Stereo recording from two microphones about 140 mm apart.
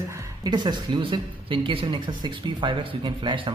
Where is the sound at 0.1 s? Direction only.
30° right (ahead or behind).